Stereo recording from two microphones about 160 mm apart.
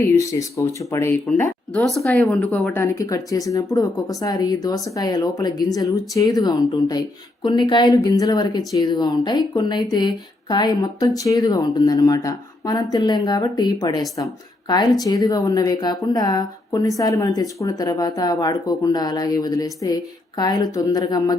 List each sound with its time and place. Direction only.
0.2 s speech: 20° left (ahead or behind)
1.7 s a woman's voice: centre (ahead or behind); by 21.3 s 25° left (ahead or behind)